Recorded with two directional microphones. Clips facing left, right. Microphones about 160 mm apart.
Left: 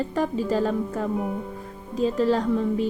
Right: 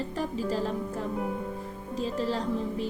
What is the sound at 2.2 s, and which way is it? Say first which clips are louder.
Speech: left 8 dB; 65° left (ahead or behind).